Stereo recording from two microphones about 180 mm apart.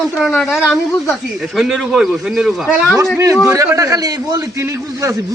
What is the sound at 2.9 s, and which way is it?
A man's voice, 15° right (ahead or behind).